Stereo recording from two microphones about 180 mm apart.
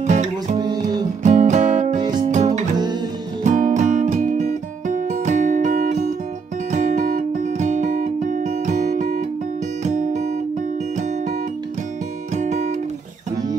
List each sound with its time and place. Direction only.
0.0 s music: 40° right (ahead or behind)
0.6 s music: 25° right (ahead or behind)
1.2 s music: 45° right (ahead or behind)
2.0 s music: 25° right (ahead or behind)
2.2 s music: 40° right (ahead or behind)
2.7 s music: 25° right (ahead or behind)
3.4 s music: 45° right (ahead or behind)
9.8 s guitar: 40° right (ahead or behind)
12.4 s music: 40° right (ahead or behind)